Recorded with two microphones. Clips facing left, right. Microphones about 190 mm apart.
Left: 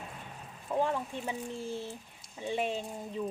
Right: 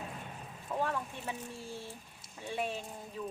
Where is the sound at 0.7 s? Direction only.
20° left (ahead or behind).